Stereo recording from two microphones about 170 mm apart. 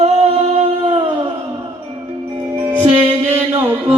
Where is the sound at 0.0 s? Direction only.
40° right (ahead or behind).